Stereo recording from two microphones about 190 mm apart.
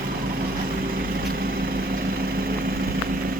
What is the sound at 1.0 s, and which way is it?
Vehicle, 50° right (ahead or behind).